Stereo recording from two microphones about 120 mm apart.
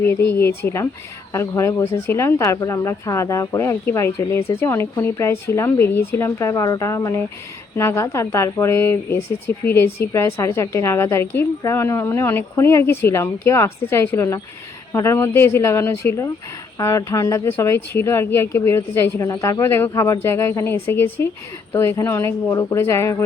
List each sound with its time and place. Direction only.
0.0 s speech: 20° left (ahead or behind)